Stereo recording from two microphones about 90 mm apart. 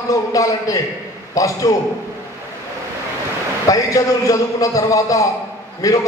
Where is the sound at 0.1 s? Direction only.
40° left (ahead or behind).